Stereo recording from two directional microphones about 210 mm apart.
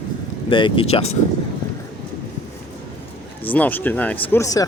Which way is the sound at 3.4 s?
10° left (ahead or behind).